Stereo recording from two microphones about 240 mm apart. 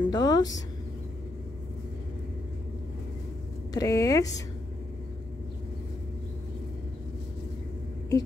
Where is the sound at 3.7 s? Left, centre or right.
Centre.